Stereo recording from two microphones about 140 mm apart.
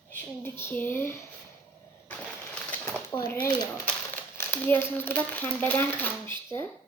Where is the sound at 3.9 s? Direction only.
15° left (ahead or behind).